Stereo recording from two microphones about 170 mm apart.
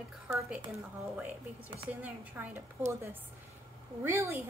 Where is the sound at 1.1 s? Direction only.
10° right (ahead or behind).